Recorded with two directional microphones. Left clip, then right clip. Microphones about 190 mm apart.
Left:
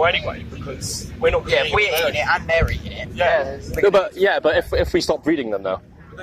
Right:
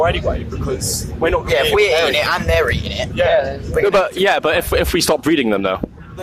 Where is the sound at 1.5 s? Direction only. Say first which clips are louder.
Right 4 dB; 20° right (ahead or behind).